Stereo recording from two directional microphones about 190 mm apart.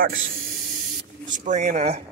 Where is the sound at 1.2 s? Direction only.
40° right (ahead or behind).